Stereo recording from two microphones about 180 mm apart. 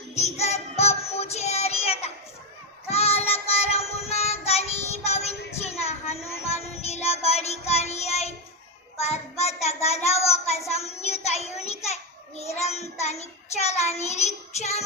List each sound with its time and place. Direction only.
0.1 s music: 35° left (ahead or behind)
2.9 s child singing: 35° left (ahead or behind)
5.0 s a sound: 35° left (ahead or behind)
6.5 s child singing: 35° left (ahead or behind)